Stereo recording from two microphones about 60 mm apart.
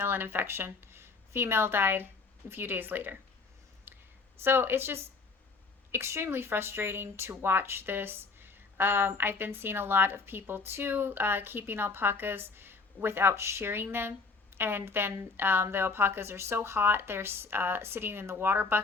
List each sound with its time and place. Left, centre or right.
0.0 s speech: right
3.9 s a sound: right
4.4 s speech: right